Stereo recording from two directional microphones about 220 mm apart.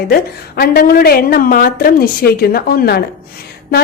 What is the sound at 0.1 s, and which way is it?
A woman's voice, 45° left (ahead or behind).